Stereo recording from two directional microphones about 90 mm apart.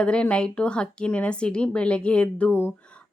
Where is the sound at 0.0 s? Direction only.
10° left (ahead or behind).